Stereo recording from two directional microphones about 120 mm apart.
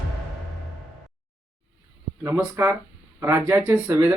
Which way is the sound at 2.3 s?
20° right (ahead or behind).